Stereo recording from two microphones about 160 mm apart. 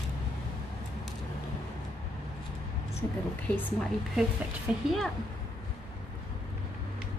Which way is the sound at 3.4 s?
10° left (ahead or behind).